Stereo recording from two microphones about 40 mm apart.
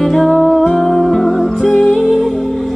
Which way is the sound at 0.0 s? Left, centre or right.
Centre.